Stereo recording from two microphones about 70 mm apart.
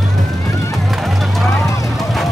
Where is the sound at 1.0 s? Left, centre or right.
Centre.